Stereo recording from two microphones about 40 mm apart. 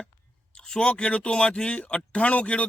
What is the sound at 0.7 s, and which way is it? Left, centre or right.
A man's voice, left.